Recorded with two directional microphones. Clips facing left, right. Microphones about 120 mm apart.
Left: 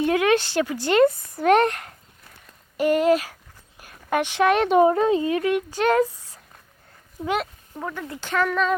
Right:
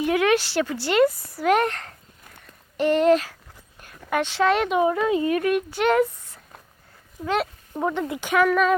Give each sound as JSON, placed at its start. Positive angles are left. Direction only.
{"t": 0.0, "sound": "a woman's voice", "side_deg": 25}
{"t": 3.8, "sound": "a sound", "side_deg": 15}
{"t": 4.7, "sound": "a woman's voice", "side_deg": 35}
{"t": 5.7, "sound": "a sound", "side_deg": 35}
{"t": 7.2, "sound": "speech", "side_deg": 0}
{"t": 7.7, "sound": "speech", "side_deg": -25}